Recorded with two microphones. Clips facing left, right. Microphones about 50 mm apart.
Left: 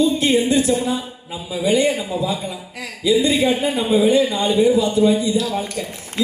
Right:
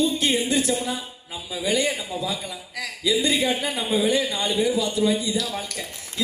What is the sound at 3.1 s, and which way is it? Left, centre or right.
A man's voice, left.